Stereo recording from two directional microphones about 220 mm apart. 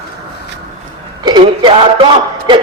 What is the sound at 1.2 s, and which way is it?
Speech, 20° right (ahead or behind).